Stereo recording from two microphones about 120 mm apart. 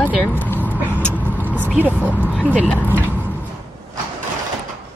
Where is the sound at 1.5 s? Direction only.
15° right (ahead or behind).